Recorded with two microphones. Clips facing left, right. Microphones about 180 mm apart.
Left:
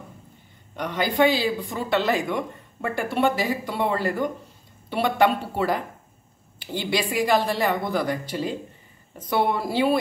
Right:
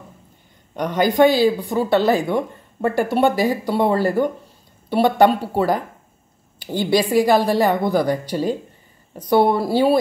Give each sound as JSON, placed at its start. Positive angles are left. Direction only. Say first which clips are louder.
{"t": 0.7, "sound": "speech", "louder": "right 6 dB", "side_deg": -45}